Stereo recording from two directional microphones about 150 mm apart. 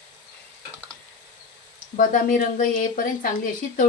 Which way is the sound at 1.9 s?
65° left (ahead or behind).